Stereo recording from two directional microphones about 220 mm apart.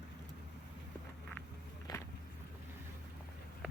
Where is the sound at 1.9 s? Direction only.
20° left (ahead or behind).